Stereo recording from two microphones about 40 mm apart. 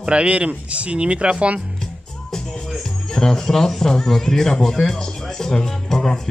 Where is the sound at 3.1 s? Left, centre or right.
Centre.